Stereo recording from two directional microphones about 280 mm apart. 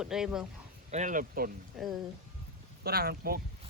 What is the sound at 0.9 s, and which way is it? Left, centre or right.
Speech, right.